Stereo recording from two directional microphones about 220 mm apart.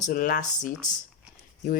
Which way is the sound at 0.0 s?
35° left (ahead or behind).